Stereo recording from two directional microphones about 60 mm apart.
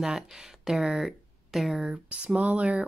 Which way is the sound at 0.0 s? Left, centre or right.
Centre.